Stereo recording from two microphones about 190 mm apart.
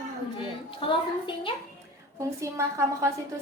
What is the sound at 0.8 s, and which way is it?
Speech, 25° left (ahead or behind).